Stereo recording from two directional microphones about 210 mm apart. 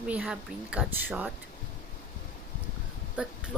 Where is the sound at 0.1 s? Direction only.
5° right (ahead or behind).